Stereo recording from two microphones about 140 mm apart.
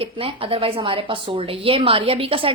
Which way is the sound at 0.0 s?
40° right (ahead or behind).